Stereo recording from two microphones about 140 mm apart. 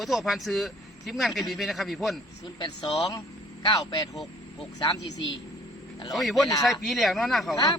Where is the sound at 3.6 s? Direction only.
35° left (ahead or behind).